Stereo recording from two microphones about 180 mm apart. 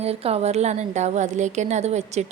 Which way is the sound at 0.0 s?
35° right (ahead or behind).